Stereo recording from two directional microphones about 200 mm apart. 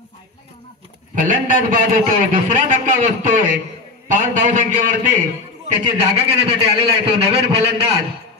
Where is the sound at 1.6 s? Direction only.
40° right (ahead or behind).